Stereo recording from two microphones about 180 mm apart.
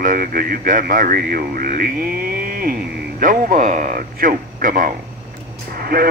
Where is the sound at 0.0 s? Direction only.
50° right (ahead or behind).